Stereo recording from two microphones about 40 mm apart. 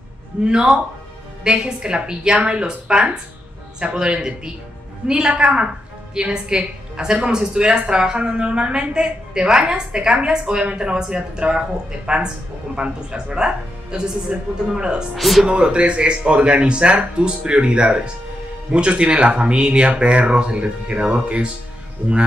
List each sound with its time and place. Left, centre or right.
0.5 s a woman's voice: centre
5.3 s a woman's voice: right
15.1 s speech: centre
15.4 s a woman's voice: right